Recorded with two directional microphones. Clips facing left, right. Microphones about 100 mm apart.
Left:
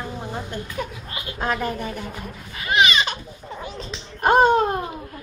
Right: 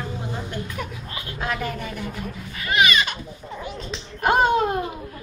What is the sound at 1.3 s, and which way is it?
A woman's voice, 35° left (ahead or behind).